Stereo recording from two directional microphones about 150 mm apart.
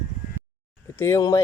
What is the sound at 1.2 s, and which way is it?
Speech, 20° left (ahead or behind).